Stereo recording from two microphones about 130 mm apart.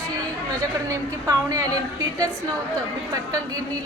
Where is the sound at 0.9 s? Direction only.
30° right (ahead or behind).